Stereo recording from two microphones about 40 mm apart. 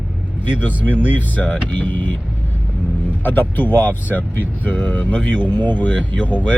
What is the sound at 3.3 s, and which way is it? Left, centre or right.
Speech, left.